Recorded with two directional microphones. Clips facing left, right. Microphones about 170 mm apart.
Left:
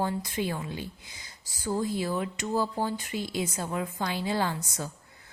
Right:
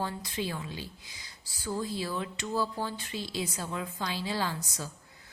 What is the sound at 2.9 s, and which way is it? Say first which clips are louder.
Speech: left 4 dB; 15° left (ahead or behind).